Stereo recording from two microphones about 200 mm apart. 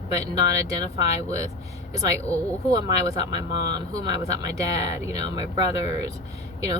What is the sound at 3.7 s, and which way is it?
Speech, 15° right (ahead or behind).